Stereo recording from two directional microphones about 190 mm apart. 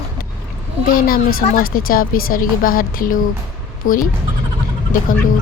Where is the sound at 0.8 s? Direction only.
50° left (ahead or behind).